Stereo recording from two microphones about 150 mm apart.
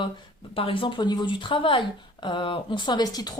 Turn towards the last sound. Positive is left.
turn(degrees=25)  # may be behind; listen again after turning